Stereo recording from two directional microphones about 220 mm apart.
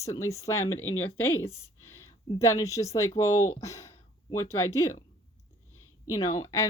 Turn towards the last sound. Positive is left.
turn(degrees=15)  # may be behind; listen again after turning